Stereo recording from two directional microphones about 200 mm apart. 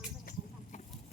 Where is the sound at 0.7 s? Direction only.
35° left (ahead or behind).